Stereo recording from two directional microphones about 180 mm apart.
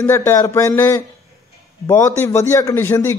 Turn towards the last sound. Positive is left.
turn(degrees=15)  # may be behind; listen again after turning